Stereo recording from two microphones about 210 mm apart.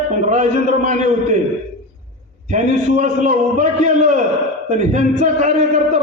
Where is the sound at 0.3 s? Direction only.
35° right (ahead or behind).